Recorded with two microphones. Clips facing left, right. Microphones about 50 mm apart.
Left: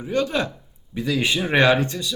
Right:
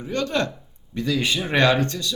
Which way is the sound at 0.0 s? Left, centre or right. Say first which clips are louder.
Left 1 dB; centre.